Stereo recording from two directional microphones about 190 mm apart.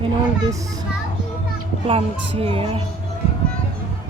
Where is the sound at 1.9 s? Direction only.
30° right (ahead or behind).